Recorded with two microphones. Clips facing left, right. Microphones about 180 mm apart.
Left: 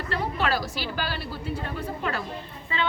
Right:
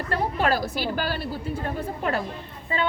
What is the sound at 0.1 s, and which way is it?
A woman's voice, 50° right (ahead or behind).